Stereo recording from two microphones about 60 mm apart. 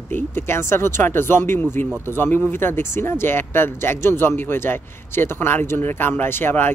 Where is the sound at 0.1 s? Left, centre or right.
Left.